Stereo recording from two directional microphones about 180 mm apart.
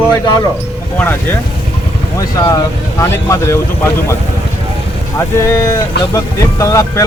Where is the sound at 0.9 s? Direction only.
10° left (ahead or behind).